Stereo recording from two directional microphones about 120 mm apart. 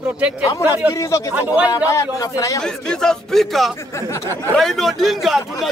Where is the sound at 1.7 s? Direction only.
30° left (ahead or behind).